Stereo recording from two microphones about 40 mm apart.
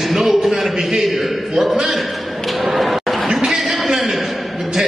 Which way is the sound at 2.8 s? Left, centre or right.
Centre.